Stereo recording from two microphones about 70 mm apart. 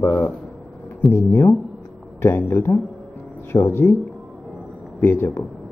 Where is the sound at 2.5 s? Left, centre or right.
Left.